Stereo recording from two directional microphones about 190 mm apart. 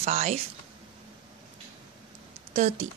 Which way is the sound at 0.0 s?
35° right (ahead or behind).